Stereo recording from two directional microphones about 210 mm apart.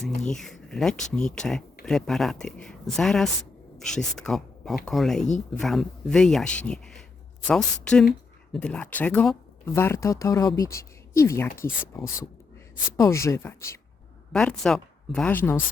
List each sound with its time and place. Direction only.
0.3 s a woman's voice: centre (ahead or behind)
13.0 s speech: 15° left (ahead or behind)